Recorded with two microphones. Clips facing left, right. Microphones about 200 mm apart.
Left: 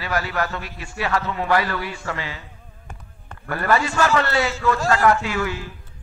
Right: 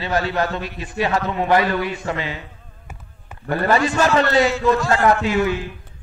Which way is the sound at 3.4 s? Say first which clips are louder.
Right 3 dB; 20° right (ahead or behind).